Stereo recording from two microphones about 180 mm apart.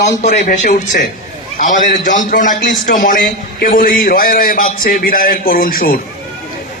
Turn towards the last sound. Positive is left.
turn(degrees=50)  # may be behind; listen again after turning